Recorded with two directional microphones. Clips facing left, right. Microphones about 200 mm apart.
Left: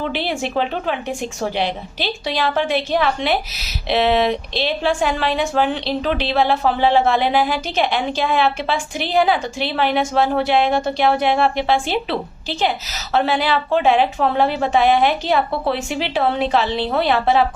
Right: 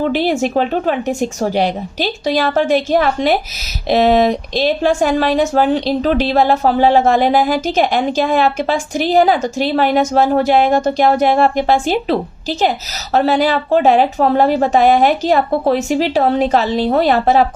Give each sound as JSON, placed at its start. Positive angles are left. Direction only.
{"t": 0.0, "sound": "speech", "side_deg": -45}